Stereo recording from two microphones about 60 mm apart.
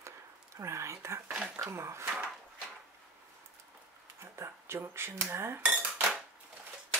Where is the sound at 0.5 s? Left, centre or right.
Right.